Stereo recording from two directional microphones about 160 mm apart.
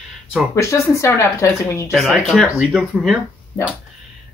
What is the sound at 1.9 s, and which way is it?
Speech, centre (ahead or behind).